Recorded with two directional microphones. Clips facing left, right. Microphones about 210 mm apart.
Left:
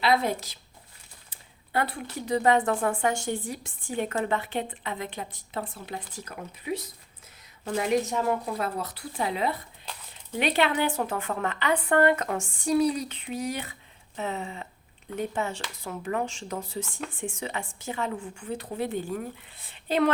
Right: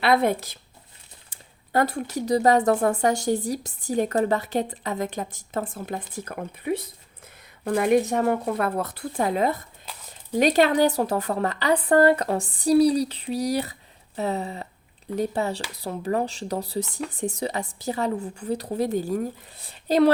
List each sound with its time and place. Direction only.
0.0 s speech: 60° right (ahead or behind)
1.3 s a woman's voice: 45° right (ahead or behind)